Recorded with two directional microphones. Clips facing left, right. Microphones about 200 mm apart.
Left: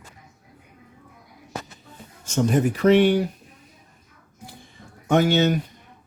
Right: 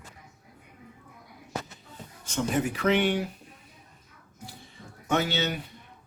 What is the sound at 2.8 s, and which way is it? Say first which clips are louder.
Speech: left 9 dB; 35° left (ahead or behind).